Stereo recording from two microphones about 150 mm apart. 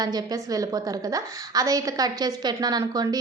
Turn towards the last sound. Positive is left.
turn(degrees=-25)  # may be behind; listen again after turning